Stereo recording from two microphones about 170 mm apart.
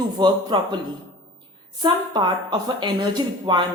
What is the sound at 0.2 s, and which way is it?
Speech, 25° right (ahead or behind).